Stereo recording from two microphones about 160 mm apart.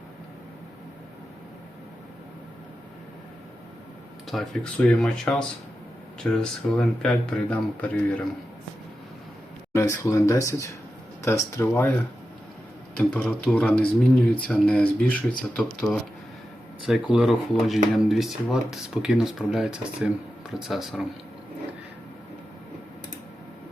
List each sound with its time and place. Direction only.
4.3 s speech: centre (ahead or behind)
9.7 s speech: 20° left (ahead or behind)
13.0 s speech: 5° left (ahead or behind)
16.8 s speech: 5° right (ahead or behind)